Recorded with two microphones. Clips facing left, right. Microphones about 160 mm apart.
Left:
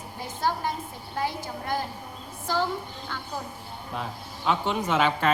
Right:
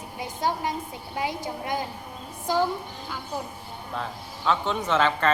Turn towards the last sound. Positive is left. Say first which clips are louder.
# right 1 dB
turn(degrees=10)  # may be behind; listen again after turning